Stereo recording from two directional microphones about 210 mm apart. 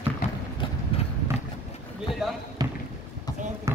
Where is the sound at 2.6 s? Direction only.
20° right (ahead or behind).